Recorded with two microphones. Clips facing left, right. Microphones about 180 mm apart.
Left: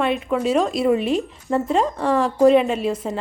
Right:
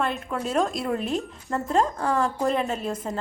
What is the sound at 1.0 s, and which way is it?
Speech, 90° left.